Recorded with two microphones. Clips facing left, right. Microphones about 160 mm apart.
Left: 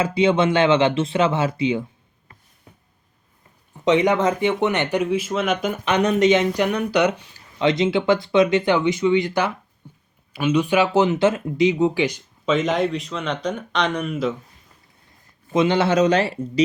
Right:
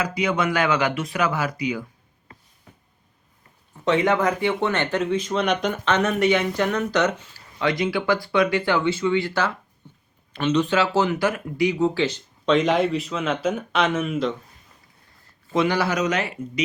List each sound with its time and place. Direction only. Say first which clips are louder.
0.0 s speech: left 5 dB; 25° left (ahead or behind)
3.8 s speech: left 3 dB; 20° left (ahead or behind)
5.0 s speech: left 1 dB; 5° left (ahead or behind)
9.8 s a sound: left 4 dB; 10° left (ahead or behind)
10.3 s speech: left 2 dB; 10° left (ahead or behind)
12.5 s speech: right 1 dB; centre (ahead or behind)
15.4 s speech: left 3 dB; 20° left (ahead or behind)